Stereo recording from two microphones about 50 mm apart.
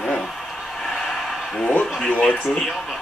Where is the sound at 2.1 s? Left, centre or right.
Left.